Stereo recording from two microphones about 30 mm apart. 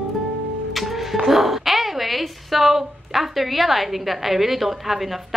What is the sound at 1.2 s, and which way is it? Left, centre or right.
A woman's voice, centre.